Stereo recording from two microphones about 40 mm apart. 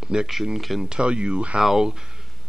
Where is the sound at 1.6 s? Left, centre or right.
Centre.